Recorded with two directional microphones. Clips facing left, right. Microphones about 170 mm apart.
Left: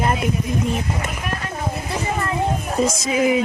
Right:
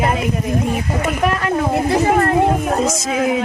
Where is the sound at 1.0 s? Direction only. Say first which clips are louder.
Right 10 dB; 75° right (ahead or behind); by 2.8 s 60° right (ahead or behind).